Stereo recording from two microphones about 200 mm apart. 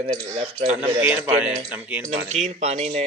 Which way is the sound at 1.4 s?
5° right (ahead or behind).